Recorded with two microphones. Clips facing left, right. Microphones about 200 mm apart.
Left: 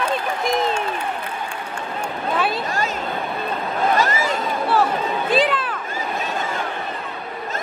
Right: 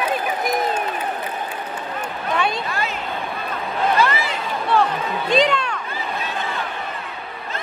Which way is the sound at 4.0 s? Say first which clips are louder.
Even; 45° left (ahead or behind).